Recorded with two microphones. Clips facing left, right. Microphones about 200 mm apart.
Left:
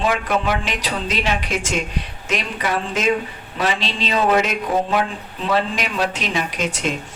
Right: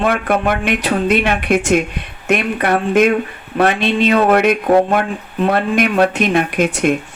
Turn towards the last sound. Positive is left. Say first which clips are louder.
# right 8 dB
turn(degrees=-60)  # may be behind; listen again after turning